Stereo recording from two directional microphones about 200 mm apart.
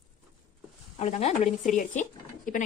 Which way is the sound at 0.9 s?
30° left (ahead or behind).